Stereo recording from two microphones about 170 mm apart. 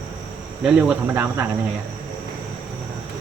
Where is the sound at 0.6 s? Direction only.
5° right (ahead or behind).